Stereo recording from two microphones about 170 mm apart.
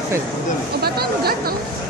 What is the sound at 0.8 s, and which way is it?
Speech, 65° right (ahead or behind).